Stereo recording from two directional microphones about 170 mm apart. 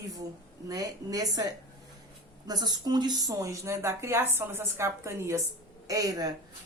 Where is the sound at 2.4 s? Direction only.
25° right (ahead or behind).